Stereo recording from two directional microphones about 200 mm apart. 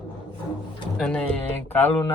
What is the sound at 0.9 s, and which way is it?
Speech, 5° left (ahead or behind).